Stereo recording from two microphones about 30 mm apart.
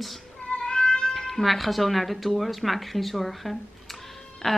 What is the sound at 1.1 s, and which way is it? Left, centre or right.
Speech, centre.